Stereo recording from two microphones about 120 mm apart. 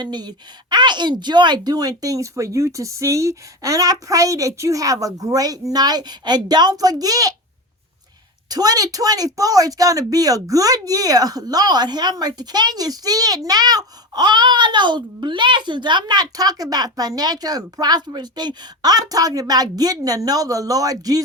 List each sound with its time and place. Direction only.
0.0 s a woman's voice: 35° right (ahead or behind)
8.4 s a woman's voice: 30° right (ahead or behind)